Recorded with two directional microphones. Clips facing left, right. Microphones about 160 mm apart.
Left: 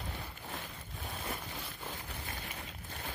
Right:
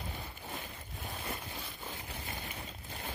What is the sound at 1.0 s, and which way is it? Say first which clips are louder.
Boat: even; centre (ahead or behind).